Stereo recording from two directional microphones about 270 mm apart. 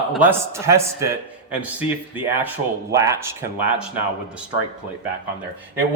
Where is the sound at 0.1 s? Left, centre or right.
Centre.